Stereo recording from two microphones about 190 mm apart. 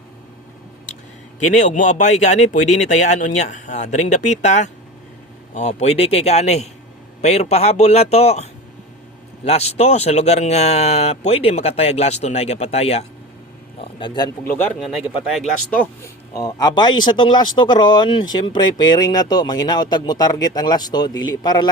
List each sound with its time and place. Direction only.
1.5 s speech: 40° left (ahead or behind)
14.8 s speech: centre (ahead or behind)
16.3 s speech: 20° left (ahead or behind)